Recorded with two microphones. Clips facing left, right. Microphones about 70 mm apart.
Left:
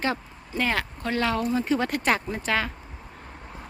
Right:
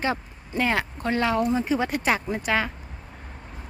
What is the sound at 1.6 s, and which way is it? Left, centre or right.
Speech, centre.